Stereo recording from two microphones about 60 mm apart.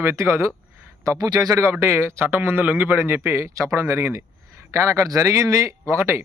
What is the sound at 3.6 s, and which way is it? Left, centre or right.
Speech, right.